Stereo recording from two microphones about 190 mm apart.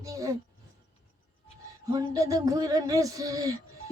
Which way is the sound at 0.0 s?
15° right (ahead or behind).